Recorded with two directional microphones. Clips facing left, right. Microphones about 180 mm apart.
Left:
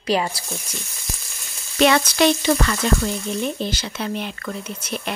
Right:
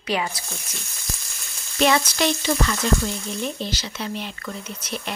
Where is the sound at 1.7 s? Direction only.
70° left (ahead or behind).